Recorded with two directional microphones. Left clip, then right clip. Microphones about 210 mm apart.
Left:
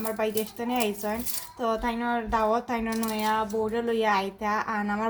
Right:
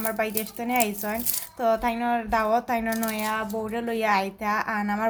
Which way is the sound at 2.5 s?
30° right (ahead or behind).